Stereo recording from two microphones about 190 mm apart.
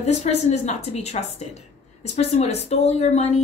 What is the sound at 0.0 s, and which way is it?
Speech, 35° left (ahead or behind).